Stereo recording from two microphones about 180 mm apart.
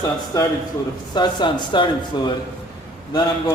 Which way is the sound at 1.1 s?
25° left (ahead or behind).